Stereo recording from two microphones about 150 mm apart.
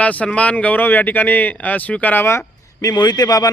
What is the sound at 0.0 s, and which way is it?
Speech, 10° left (ahead or behind).